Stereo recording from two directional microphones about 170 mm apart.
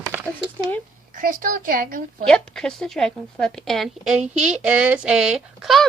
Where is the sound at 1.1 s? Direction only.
55° right (ahead or behind).